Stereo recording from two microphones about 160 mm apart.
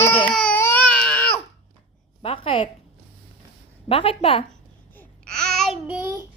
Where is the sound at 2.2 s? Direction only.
35° left (ahead or behind).